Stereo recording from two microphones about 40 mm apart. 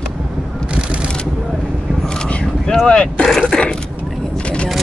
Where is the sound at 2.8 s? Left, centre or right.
Left.